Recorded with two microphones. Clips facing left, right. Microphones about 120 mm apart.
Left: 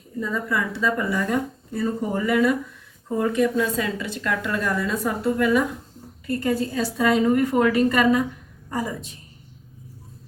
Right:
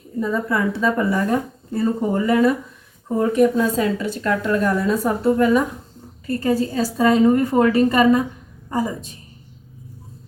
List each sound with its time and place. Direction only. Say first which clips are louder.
0.3 s a woman's voice: right 5 dB; 30° right (ahead or behind)
8.7 s a woman's voice: right 5 dB; 20° right (ahead or behind)